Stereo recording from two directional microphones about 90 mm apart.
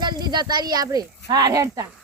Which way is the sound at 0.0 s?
50° right (ahead or behind).